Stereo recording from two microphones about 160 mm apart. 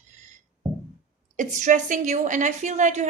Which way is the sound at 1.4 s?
50° right (ahead or behind).